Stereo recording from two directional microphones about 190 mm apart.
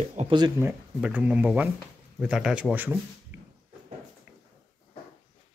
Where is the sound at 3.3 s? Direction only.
10° right (ahead or behind).